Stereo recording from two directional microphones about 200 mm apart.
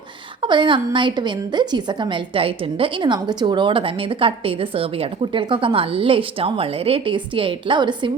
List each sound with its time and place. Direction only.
0.4 s a woman's voice: 25° right (ahead or behind)